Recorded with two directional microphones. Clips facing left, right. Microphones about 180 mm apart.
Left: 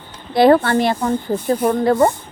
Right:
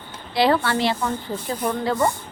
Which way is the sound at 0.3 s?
50° left (ahead or behind).